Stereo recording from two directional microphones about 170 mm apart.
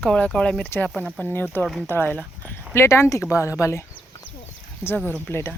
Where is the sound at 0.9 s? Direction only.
5° right (ahead or behind).